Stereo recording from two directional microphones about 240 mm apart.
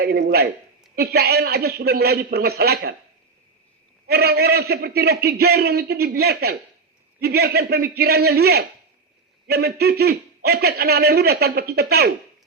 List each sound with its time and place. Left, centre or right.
0.0 s a man's voice: right
4.0 s a man's voice: right